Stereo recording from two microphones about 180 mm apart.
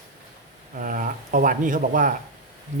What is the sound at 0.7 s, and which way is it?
Speech, 50° right (ahead or behind).